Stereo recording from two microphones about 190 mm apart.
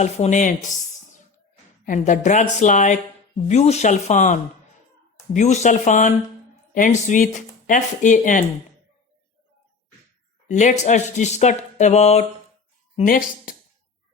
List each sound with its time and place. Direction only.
0.0 s speech: 40° left (ahead or behind)
1.8 s speech: 45° left (ahead or behind)
10.5 s speech: 40° left (ahead or behind)
13.0 s speech: 50° left (ahead or behind)